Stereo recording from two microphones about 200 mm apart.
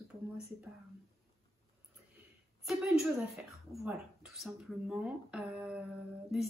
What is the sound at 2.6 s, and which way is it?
Speech, centre (ahead or behind).